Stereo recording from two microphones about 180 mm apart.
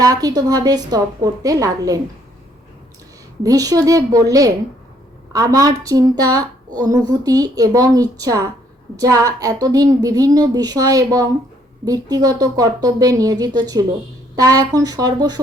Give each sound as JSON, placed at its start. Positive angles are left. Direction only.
{"t": 0.0, "sound": "a woman's voice", "side_deg": -20}
{"t": 3.4, "sound": "a woman's voice", "side_deg": -20}